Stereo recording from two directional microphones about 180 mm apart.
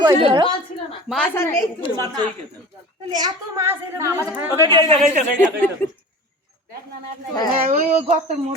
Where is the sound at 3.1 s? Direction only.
20° right (ahead or behind).